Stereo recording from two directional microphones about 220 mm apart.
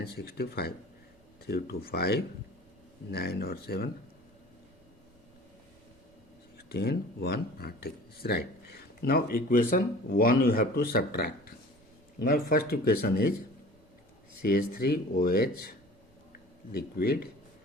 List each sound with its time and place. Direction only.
0.0 s speech: 45° left (ahead or behind)
6.7 s speech: 45° left (ahead or behind)
14.4 s speech: 45° left (ahead or behind)
16.7 s speech: 45° left (ahead or behind)